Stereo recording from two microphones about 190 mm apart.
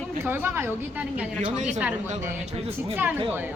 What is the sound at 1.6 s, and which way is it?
Speech, 40° right (ahead or behind).